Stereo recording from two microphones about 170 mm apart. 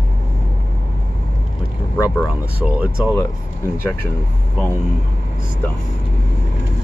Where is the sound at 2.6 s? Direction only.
5° right (ahead or behind).